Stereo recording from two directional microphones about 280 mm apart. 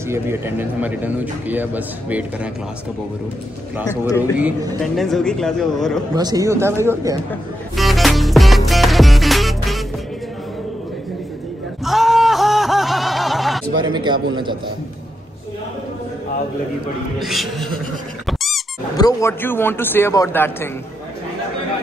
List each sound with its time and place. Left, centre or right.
0.1 s a man's voice: centre
3.7 s a man's voice: centre
6.1 s a man's voice: centre
7.2 s music: centre
11.8 s a sound: centre
13.7 s a man's voice: centre
17.2 s a man's voice: centre
18.2 s squeak: centre
18.9 s a man's voice: centre